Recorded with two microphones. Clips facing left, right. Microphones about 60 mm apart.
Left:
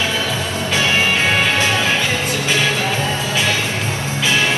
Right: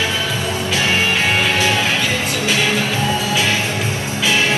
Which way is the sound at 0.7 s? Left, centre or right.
Left.